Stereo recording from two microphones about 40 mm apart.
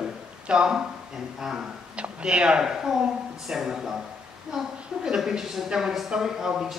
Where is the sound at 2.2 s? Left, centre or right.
Right.